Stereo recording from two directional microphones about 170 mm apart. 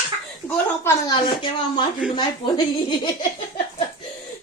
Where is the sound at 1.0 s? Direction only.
30° left (ahead or behind).